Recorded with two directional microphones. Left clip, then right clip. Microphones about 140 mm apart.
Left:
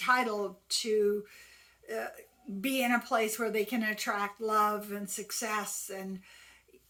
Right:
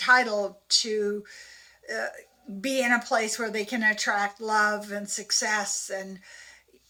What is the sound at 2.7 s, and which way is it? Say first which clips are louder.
Speech: right 5 dB; 20° left (ahead or behind).